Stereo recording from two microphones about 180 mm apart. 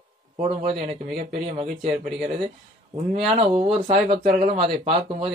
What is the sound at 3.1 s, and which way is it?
Speech, 35° right (ahead or behind).